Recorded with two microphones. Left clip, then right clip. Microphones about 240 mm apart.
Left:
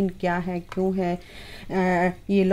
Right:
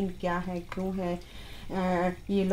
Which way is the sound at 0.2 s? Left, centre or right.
Left.